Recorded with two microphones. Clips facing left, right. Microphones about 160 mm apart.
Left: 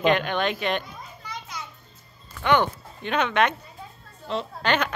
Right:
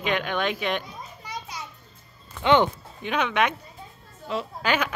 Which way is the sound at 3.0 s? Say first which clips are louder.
Left 1 dB; 5° right (ahead or behind).